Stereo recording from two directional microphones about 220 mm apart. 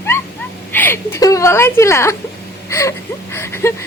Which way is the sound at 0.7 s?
10° left (ahead or behind).